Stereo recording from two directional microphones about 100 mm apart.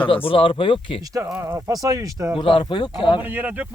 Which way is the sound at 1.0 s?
35° right (ahead or behind).